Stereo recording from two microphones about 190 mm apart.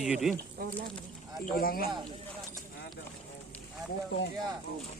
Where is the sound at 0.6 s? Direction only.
50° right (ahead or behind).